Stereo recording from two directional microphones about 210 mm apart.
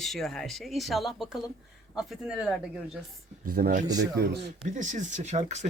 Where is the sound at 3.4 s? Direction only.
45° right (ahead or behind).